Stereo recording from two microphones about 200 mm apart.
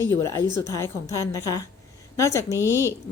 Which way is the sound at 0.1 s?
15° left (ahead or behind).